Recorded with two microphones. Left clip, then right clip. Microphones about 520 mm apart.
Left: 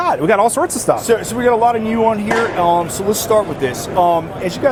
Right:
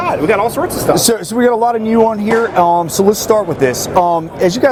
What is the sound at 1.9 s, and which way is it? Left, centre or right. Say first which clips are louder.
Speech: right 3 dB; right.